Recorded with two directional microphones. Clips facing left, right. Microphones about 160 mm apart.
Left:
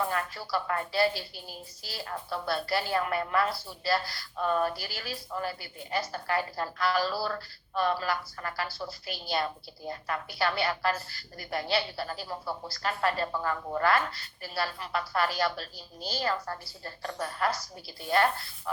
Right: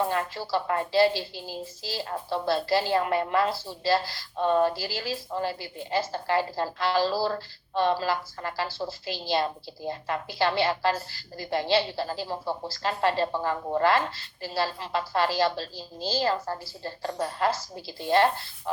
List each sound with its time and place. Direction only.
0.0 s a woman's voice: 25° right (ahead or behind)